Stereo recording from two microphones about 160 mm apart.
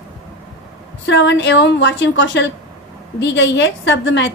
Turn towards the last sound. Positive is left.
turn(degrees=90)